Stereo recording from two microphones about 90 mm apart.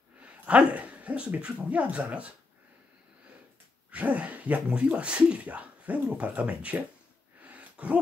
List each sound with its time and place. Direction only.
0.2 s speech: 15° right (ahead or behind)
3.9 s speech: 15° right (ahead or behind)
7.4 s a sound: 15° right (ahead or behind)